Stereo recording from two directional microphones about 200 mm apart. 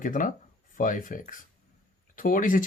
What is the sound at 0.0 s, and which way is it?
Speech, 40° left (ahead or behind).